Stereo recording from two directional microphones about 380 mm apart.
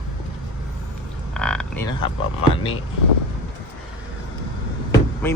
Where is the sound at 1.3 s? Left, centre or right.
Centre.